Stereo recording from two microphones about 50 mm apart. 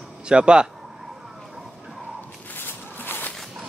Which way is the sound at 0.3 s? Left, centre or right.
Centre.